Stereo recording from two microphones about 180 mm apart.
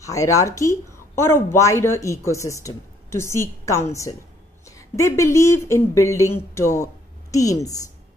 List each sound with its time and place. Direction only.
0.0 s speech: 20° left (ahead or behind)